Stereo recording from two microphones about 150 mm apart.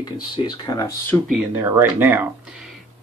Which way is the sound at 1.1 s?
15° left (ahead or behind).